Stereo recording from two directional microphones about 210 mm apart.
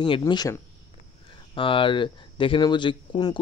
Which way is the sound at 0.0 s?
20° left (ahead or behind).